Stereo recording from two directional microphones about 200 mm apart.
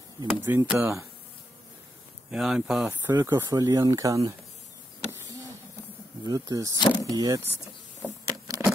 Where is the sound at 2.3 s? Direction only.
5° right (ahead or behind).